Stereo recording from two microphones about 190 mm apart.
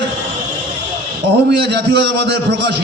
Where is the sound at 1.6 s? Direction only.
60° right (ahead or behind).